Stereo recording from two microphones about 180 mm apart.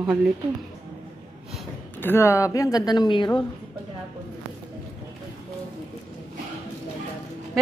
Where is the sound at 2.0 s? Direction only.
15° left (ahead or behind).